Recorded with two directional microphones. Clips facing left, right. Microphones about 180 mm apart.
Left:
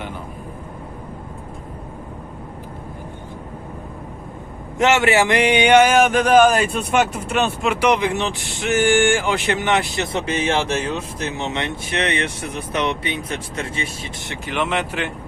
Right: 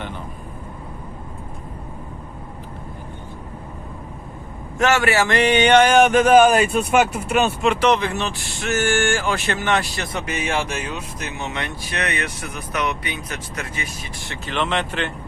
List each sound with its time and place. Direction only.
4.8 s speech: 20° left (ahead or behind); by 7.7 s 10° right (ahead or behind)
7.7 s speech: 10° left (ahead or behind)